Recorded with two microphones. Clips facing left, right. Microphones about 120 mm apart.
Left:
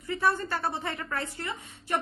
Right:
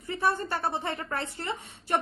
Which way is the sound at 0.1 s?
25° right (ahead or behind).